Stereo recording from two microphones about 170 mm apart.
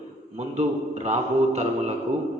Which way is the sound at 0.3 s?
40° right (ahead or behind).